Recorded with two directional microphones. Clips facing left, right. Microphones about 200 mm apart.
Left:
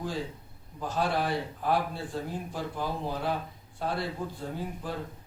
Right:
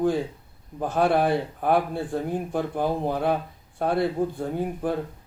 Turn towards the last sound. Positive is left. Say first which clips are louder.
# right 9 dB
turn(degrees=-55)  # may be behind; listen again after turning